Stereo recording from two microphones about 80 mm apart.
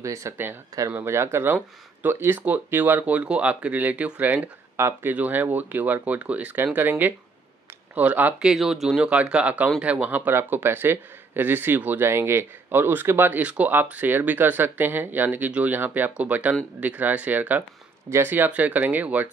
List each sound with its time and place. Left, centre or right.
0.0 s speech: right
0.7 s speech: right
1.0 s speech: right; by 4.5 s centre
4.7 s speech: right
5.1 s speech: right
8.5 s speech: centre; by 13.4 s right
13.4 s speech: centre